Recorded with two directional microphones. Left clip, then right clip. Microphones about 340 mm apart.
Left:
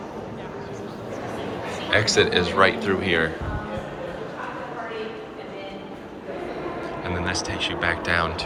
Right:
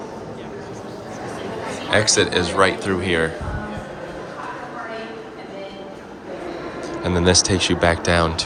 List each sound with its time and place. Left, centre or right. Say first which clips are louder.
1.9 s speech: right 2 dB; centre
7.0 s speech: right 11 dB; centre